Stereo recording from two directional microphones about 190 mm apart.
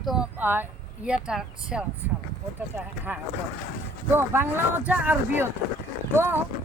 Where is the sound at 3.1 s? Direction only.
10° right (ahead or behind).